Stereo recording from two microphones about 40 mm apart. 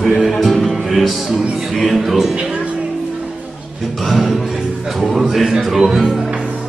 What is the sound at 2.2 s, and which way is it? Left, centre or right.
Music, centre.